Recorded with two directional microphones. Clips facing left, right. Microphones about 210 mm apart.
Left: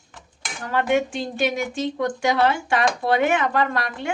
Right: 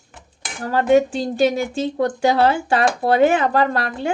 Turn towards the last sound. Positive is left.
turn(degrees=-35)  # may be behind; listen again after turning